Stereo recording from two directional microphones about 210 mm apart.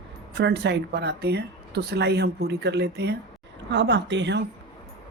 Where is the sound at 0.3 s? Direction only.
55° right (ahead or behind).